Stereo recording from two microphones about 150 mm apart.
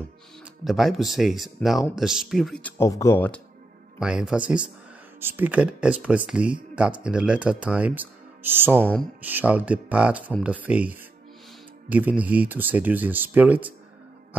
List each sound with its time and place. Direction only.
0.7 s speech: centre (ahead or behind)
2.8 s speech: 20° left (ahead or behind)
4.0 s speech: 5° right (ahead or behind)
8.7 s speech: 10° left (ahead or behind)
9.2 s speech: 10° right (ahead or behind)